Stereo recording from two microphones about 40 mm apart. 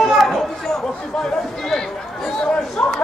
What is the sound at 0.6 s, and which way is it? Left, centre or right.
Chatter, centre.